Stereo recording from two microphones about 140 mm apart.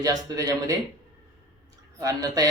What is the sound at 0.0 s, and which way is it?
Speech, 25° right (ahead or behind).